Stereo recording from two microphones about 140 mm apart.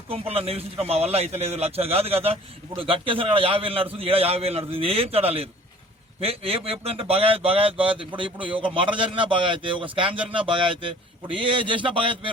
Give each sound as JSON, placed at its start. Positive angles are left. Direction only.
{"t": 0.1, "sound": "a man's voice", "side_deg": -45}